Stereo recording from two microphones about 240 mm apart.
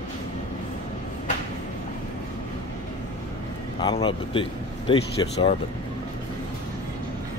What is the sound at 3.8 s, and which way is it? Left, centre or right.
Speech, centre.